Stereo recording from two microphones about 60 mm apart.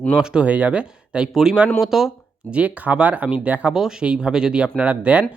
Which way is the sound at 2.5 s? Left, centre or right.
Right.